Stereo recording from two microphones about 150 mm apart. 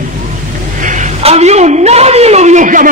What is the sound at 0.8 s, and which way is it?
A woman's voice, 55° right (ahead or behind).